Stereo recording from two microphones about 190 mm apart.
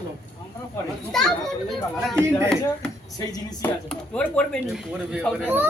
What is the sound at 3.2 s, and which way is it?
Speech, 20° left (ahead or behind).